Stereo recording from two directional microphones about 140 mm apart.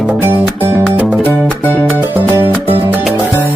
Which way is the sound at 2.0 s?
15° right (ahead or behind).